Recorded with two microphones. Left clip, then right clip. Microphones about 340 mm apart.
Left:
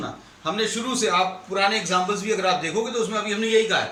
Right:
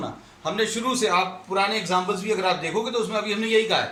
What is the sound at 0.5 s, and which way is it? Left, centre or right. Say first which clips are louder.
A man's voice: right 1 dB; centre.